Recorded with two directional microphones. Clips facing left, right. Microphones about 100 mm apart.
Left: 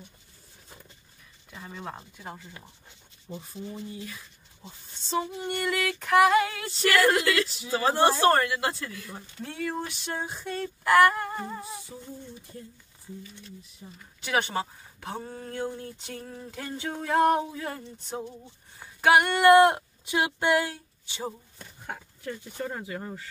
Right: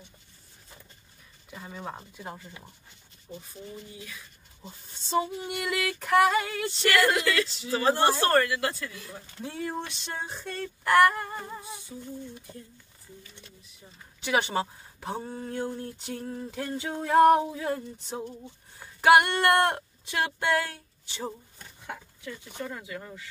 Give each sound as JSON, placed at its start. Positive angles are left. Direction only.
{"t": 1.5, "sound": "female singing", "side_deg": -5}
{"t": 4.6, "sound": "female singing", "side_deg": -5}
{"t": 7.7, "sound": "speech", "side_deg": 20}
{"t": 9.4, "sound": "female singing", "side_deg": -5}
{"t": 9.8, "sound": "a sound", "side_deg": 10}
{"t": 10.9, "sound": "female singing", "side_deg": 0}
{"t": 14.2, "sound": "speech", "side_deg": -5}
{"t": 15.8, "sound": "female singing", "side_deg": -5}
{"t": 17.5, "sound": "speech", "side_deg": -10}
{"t": 18.9, "sound": "female singing", "side_deg": 0}
{"t": 19.3, "sound": "speech", "side_deg": 5}
{"t": 21.8, "sound": "speech", "side_deg": 40}